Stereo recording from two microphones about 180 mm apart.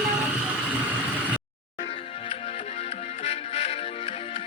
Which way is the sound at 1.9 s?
30° left (ahead or behind).